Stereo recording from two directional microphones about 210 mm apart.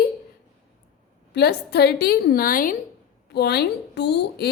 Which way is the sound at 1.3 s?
50° left (ahead or behind).